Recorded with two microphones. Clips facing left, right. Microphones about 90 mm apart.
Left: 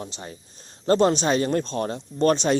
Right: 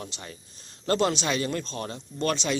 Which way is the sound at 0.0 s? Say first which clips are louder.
Left 4 dB; 30° left (ahead or behind).